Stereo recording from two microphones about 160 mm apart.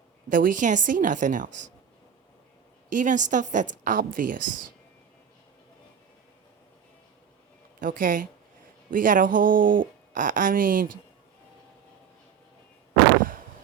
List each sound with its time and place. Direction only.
0.3 s a woman's voice: 60° right (ahead or behind)
2.9 s a woman's voice: 50° right (ahead or behind)
7.8 s speech: 60° right (ahead or behind)